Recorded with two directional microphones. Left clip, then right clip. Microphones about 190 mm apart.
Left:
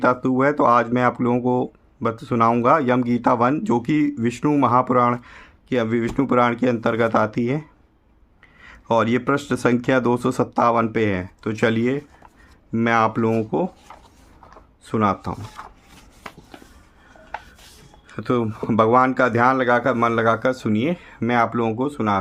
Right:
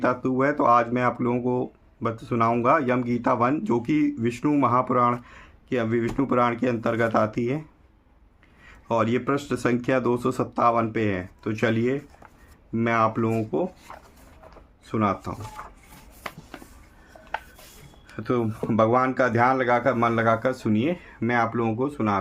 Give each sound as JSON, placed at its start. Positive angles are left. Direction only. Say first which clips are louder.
{"t": 0.0, "sound": "speech", "louder": "left 5 dB", "side_deg": 40}
{"t": 8.6, "sound": "speech", "louder": "left 5 dB", "side_deg": 45}
{"t": 14.8, "sound": "speech", "louder": "left 4 dB", "side_deg": 45}
{"t": 15.6, "sound": "wood", "louder": "left 2 dB", "side_deg": 20}
{"t": 18.2, "sound": "speech", "louder": "left 3 dB", "side_deg": 45}